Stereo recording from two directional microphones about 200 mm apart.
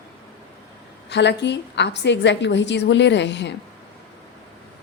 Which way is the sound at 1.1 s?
60° left (ahead or behind).